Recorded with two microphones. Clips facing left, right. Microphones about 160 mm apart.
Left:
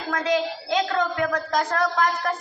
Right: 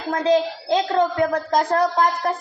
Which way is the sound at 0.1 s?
30° right (ahead or behind).